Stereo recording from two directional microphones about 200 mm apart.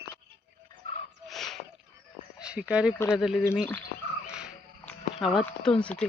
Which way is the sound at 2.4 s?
5° right (ahead or behind).